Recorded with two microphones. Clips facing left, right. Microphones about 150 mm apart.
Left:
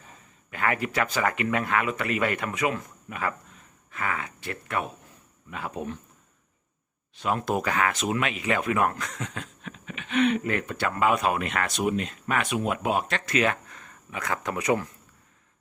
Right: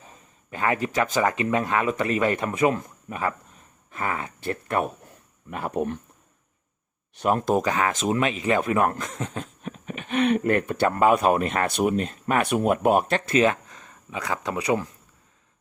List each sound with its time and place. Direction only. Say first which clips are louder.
1.1 s speech: right 3 dB; 20° right (ahead or behind); by 4.8 s 35° right (ahead or behind)
5.5 s speech: right 6 dB; 50° right (ahead or behind)
7.3 s speech: right 5 dB; 45° right (ahead or behind)
7.6 s speech: right 2 dB; 20° right (ahead or behind)
7.9 s speech: right 4 dB; 35° right (ahead or behind)
9.4 s speech: right 5 dB; 45° right (ahead or behind)
10.8 s speech: right 4 dB; 40° right (ahead or behind)
13.5 s speech: right 3 dB; 15° right (ahead or behind)